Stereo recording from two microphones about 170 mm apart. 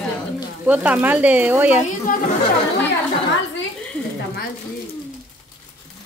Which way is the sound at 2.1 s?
55° left (ahead or behind).